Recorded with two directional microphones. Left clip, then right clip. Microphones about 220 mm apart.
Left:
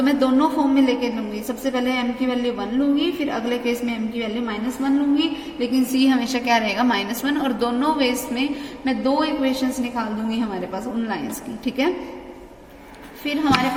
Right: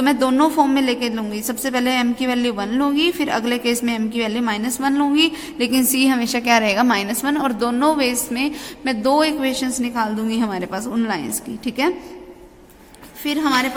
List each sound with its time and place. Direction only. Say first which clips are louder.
0.0 s a woman's voice: right 2 dB; 35° right (ahead or behind)
11.6 s a woman's voice: right 2 dB; 30° right (ahead or behind)
13.2 s a woman's voice: right 1 dB; 30° right (ahead or behind)